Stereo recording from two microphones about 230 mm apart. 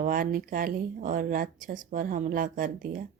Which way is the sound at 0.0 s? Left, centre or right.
Right.